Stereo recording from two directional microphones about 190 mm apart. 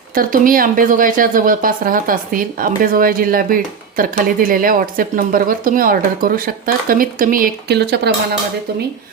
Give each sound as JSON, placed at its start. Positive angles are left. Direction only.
{"t": 0.1, "sound": "speech", "side_deg": -45}